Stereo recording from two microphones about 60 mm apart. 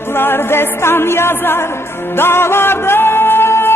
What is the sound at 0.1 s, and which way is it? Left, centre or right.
Music, left.